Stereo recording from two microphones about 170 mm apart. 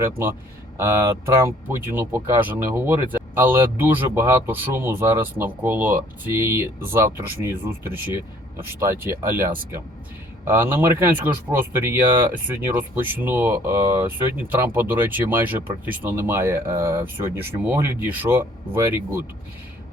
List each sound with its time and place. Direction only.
0.0 s speech: 15° right (ahead or behind)
10.4 s speech: 15° right (ahead or behind)